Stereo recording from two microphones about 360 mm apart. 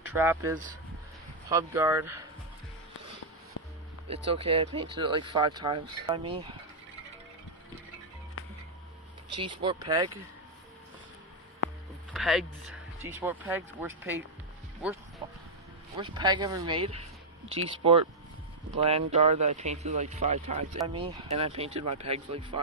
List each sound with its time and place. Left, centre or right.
0.1 s speech: centre
4.3 s speech: centre
9.3 s speech: centre
12.1 s a sound: centre
13.0 s speech: centre
15.2 s a sound: centre
16.0 s speech: centre